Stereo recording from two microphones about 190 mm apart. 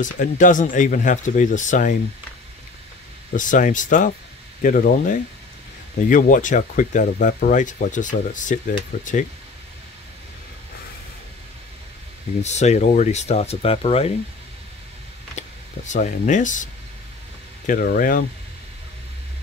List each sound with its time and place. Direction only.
0.0 s speech: 45° left (ahead or behind)
3.3 s speech: 45° left (ahead or behind)
12.4 s speech: 35° left (ahead or behind)
15.3 s speech: 40° left (ahead or behind)
17.6 s speech: 45° left (ahead or behind)